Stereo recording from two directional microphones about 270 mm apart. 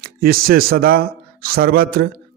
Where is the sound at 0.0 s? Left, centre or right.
Right.